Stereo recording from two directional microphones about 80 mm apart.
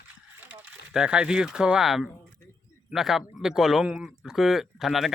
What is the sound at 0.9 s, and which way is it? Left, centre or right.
Speech, centre.